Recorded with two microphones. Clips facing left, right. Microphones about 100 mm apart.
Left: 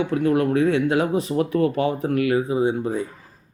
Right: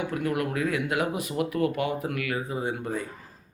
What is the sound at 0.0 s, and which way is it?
Speech, 30° left (ahead or behind).